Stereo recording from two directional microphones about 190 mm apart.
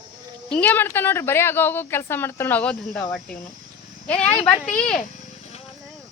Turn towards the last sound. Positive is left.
turn(degrees=5)  # may be behind; listen again after turning